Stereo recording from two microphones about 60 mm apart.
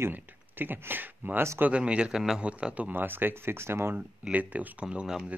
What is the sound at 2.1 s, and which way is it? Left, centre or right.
Speech, centre.